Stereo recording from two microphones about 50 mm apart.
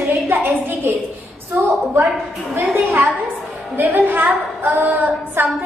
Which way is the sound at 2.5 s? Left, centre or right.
Right.